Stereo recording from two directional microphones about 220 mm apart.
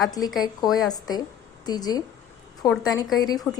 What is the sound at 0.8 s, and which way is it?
A woman's voice, 15° left (ahead or behind).